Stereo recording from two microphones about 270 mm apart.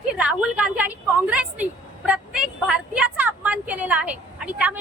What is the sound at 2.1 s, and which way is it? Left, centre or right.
Vehicle, centre.